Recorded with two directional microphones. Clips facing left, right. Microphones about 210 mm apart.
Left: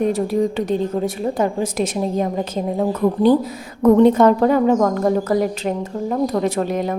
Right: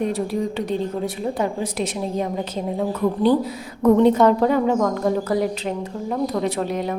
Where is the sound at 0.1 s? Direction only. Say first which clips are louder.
Left 5 dB; 45° left (ahead or behind).